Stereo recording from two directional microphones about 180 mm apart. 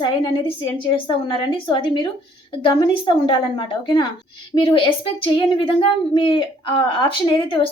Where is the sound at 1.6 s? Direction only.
25° left (ahead or behind).